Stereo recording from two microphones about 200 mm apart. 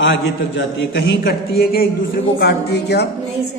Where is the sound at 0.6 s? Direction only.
60° left (ahead or behind).